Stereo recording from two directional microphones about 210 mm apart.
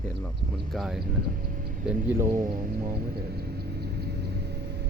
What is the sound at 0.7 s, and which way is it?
Speech, centre (ahead or behind).